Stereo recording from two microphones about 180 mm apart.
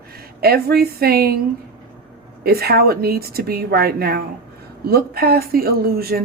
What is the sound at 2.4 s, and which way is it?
Speech, 60° right (ahead or behind).